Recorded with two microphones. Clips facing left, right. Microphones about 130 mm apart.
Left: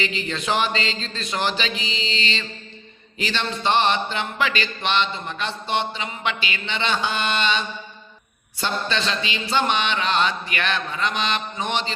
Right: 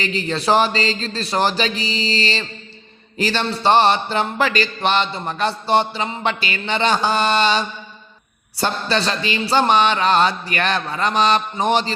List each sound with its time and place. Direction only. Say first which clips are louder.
0.0 s mantra: right 5 dB; 40° right (ahead or behind)